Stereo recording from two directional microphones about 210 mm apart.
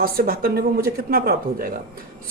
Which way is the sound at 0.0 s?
45° right (ahead or behind).